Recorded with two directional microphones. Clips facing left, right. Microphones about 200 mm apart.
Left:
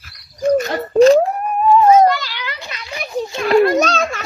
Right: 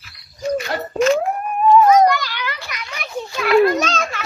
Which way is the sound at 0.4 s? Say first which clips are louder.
Left 6 dB; 45° left (ahead or behind).